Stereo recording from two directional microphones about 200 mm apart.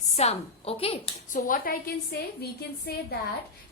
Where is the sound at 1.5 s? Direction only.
45° left (ahead or behind).